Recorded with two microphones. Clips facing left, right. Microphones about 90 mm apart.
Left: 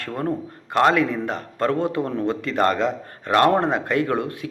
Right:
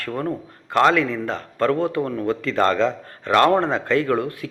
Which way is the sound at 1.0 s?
20° left (ahead or behind).